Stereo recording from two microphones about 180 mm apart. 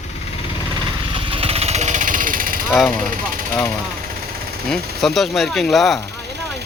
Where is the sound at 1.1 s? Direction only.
30° right (ahead or behind); by 2.6 s 50° right (ahead or behind).